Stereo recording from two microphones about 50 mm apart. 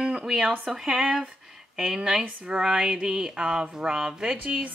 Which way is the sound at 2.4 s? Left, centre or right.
Centre.